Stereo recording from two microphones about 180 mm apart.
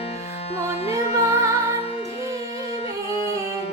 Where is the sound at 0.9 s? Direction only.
35° left (ahead or behind).